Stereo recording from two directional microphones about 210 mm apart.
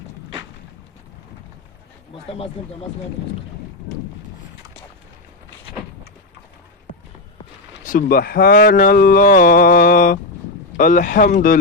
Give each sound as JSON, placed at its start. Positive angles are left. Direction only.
{"t": 7.9, "sound": "speech", "side_deg": 45}